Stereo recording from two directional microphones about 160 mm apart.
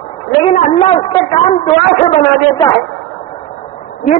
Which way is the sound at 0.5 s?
40° left (ahead or behind).